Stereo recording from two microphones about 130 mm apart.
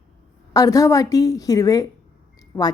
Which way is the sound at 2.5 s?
15° left (ahead or behind).